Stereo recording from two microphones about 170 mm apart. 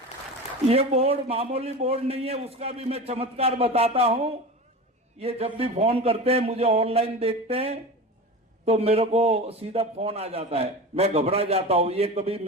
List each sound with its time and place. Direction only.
0.7 s a man's voice: 35° right (ahead or behind)